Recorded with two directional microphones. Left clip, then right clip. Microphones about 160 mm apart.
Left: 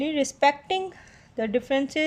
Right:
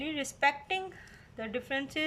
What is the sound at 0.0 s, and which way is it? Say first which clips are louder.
A woman's voice: left 8 dB; 35° left (ahead or behind).